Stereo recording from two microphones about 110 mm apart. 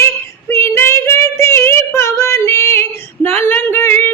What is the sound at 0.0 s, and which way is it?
Child singing, 20° left (ahead or behind).